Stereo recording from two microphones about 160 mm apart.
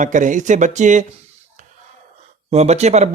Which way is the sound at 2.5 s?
45° right (ahead or behind).